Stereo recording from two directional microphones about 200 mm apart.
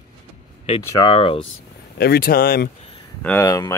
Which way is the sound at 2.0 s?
50° left (ahead or behind).